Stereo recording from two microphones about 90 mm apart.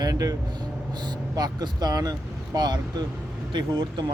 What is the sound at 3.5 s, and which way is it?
Speech, 60° right (ahead or behind).